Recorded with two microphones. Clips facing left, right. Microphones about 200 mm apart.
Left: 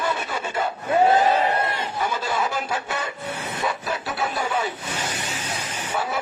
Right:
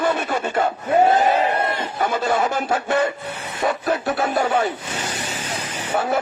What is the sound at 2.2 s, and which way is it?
Speech, 50° right (ahead or behind).